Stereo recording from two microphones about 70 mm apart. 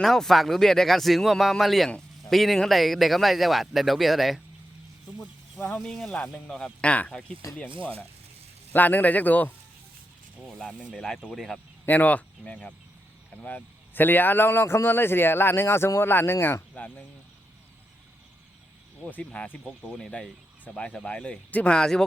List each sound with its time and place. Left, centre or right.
0.0 s speech: centre
5.5 s speech: centre
5.8 s speech: centre
8.7 s a man's voice: left
10.9 s speech: centre
11.9 s speech: left
19.2 s speech: centre